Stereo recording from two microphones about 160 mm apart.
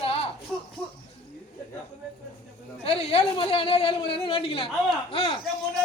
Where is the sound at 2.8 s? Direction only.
40° left (ahead or behind).